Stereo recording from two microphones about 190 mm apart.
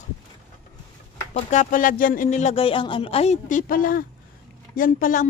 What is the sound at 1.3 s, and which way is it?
Speech, 40° left (ahead or behind).